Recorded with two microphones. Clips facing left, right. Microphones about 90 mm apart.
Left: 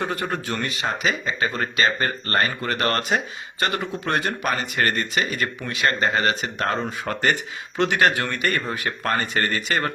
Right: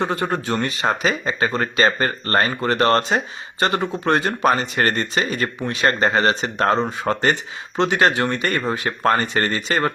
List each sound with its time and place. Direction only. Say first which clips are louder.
0.0 s speech: right 4 dB; 30° right (ahead or behind)